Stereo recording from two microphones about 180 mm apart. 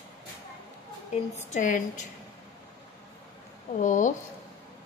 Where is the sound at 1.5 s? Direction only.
45° left (ahead or behind).